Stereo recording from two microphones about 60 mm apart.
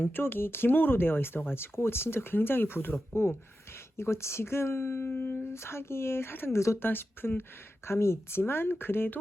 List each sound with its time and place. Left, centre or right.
0.0 s speech: left
7.9 s speech: left